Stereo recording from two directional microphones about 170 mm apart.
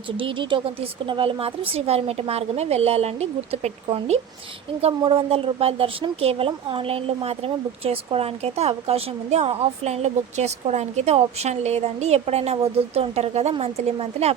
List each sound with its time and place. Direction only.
0.2 s speech: 30° right (ahead or behind)